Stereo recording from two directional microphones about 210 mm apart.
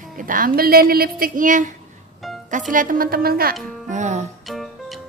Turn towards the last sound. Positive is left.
turn(degrees=0)  # may be behind; listen again after turning